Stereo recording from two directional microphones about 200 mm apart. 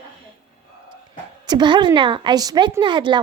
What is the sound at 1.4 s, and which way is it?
A child's voice, 20° right (ahead or behind).